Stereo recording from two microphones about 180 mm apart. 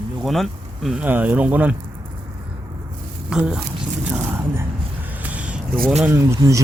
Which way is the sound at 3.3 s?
5° right (ahead or behind).